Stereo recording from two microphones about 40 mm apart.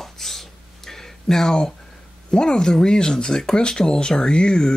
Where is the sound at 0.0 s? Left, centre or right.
Centre.